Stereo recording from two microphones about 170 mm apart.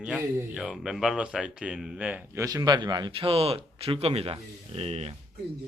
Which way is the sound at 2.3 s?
20° right (ahead or behind).